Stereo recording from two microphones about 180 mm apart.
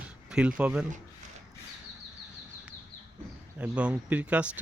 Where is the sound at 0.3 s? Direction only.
5° right (ahead or behind).